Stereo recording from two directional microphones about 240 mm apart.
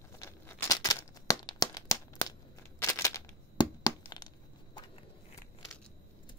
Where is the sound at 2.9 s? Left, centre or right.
Centre.